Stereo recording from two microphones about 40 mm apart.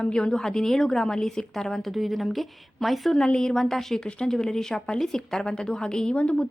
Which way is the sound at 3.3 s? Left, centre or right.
Centre.